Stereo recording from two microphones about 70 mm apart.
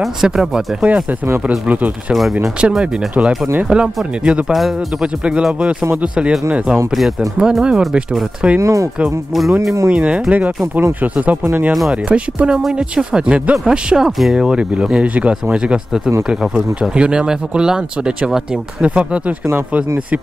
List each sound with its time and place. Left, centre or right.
0.0 s speech: centre
1.7 s speech: right
4.5 s speech: centre
5.0 s speech: centre
8.5 s speech: right
9.8 s speech: centre